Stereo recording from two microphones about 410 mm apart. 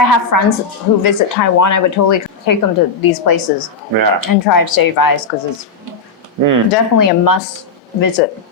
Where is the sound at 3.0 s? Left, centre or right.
Left.